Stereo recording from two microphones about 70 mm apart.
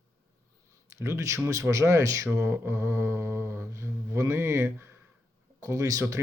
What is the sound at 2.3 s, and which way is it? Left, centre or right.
Mantra, right.